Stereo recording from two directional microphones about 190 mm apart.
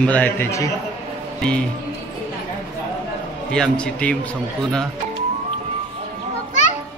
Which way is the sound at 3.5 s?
5° left (ahead or behind).